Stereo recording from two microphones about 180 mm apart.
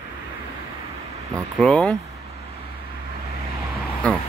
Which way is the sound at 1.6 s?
5° left (ahead or behind).